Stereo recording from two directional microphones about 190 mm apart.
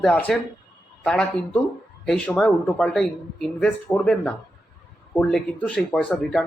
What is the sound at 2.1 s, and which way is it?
Speech, 5° left (ahead or behind).